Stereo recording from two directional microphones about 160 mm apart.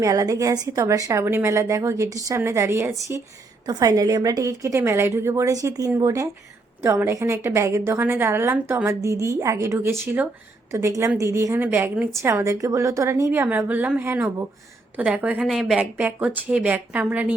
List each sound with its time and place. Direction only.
0.0 s a woman's voice: 20° right (ahead or behind)